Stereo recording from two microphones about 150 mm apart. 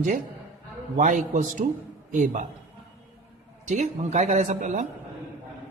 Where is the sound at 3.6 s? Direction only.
50° right (ahead or behind).